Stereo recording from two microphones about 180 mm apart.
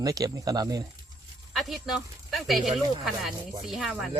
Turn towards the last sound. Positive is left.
turn(degrees=0)  # may be behind; listen again after turning